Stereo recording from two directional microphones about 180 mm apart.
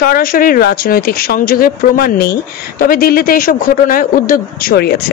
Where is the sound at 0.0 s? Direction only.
55° left (ahead or behind).